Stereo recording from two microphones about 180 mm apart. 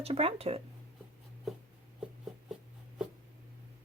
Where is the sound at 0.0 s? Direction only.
35° right (ahead or behind).